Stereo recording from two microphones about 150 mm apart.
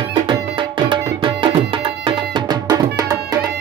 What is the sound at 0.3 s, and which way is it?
Music, 30° right (ahead or behind).